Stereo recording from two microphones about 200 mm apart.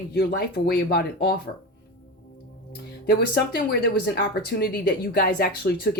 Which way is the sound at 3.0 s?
50° left (ahead or behind).